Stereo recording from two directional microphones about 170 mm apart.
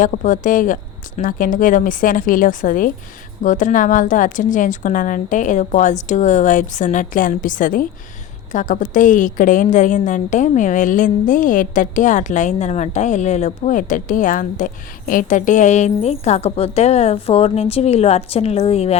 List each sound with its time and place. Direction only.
0.0 s a woman's voice: 50° left (ahead or behind)